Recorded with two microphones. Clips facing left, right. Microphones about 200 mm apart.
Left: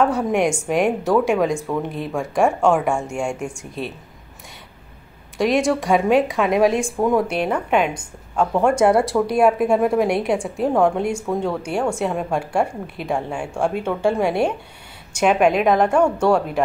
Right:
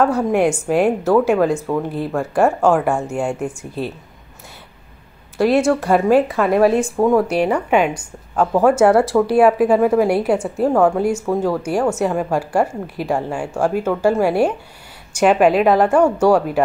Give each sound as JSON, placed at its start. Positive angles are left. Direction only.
{"t": 0.3, "sound": "a woman's voice", "side_deg": -5}
{"t": 5.4, "sound": "a woman's voice", "side_deg": -5}